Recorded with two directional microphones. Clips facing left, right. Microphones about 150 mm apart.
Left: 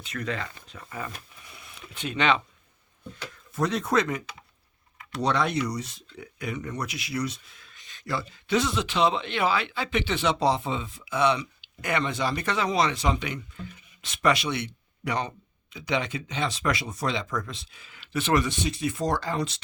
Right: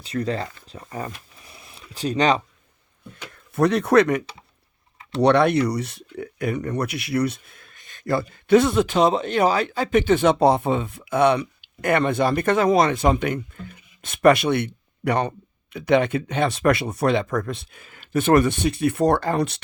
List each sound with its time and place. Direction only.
0.0 s speech: 35° right (ahead or behind)
3.3 s speech: 60° right (ahead or behind)
5.2 s speech: 65° right (ahead or behind)